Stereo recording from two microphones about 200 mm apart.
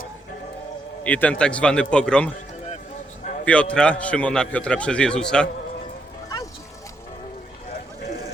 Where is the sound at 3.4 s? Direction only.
5° left (ahead or behind).